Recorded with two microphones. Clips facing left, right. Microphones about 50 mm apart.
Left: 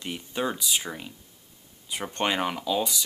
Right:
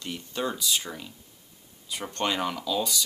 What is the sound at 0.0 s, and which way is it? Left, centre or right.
Speech, centre.